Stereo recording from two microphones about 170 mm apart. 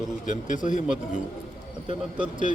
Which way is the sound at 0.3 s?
50° left (ahead or behind).